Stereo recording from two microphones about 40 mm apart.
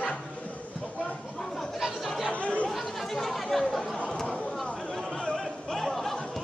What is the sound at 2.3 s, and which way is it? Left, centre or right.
Chatter, left.